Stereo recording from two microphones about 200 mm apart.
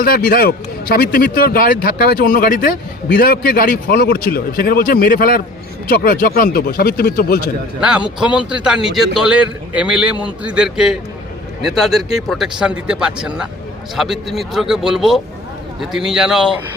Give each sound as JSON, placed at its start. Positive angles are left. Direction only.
{"t": 0.0, "sound": "speech", "side_deg": 45}
{"t": 7.8, "sound": "a man's voice", "side_deg": -5}